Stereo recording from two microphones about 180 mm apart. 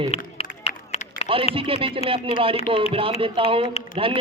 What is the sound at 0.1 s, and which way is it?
Run, 35° left (ahead or behind).